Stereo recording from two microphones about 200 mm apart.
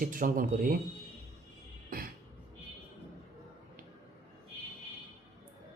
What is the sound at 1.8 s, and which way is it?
Beatboxing, 45° right (ahead or behind).